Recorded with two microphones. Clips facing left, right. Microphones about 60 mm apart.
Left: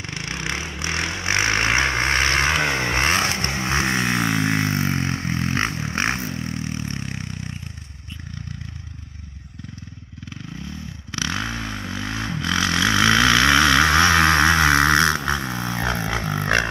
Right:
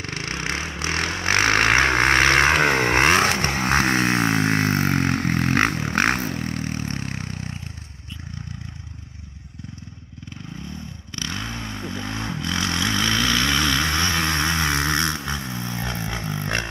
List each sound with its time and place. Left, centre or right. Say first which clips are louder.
0.0 s vehicle: right 1 dB; centre
0.9 s a sound: right 1 dB; centre
1.7 s vehicle: right 3 dB; centre
3.9 s vehicle: right 1 dB; right
4.9 s vehicle: right 3 dB; centre
5.2 s vehicle: right 3 dB; right
6.0 s a sound: right 2 dB; centre
6.6 s vehicle: right 1 dB; right
11.1 s motorcycle: left 5 dB; left
12.0 s vehicle: left 2 dB; centre
12.4 s vehicle: left 4 dB; left
12.7 s vehicle: left 7 dB; centre
13.3 s vehicle: left 6 dB; left
16.1 s a sound: left 5 dB; left